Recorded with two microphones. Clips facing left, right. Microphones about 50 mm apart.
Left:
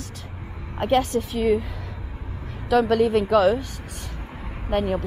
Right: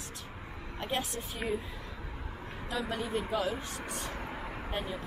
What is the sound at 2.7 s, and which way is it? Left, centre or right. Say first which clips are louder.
Speech: left 16 dB; left.